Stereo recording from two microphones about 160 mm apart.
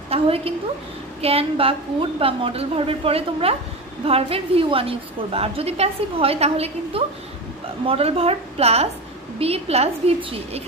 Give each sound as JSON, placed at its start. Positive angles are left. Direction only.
{"t": 0.1, "sound": "a woman's voice", "side_deg": -35}